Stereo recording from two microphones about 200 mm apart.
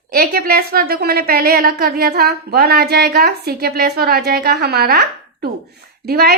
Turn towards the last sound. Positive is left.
turn(degrees=-50)  # may be behind; listen again after turning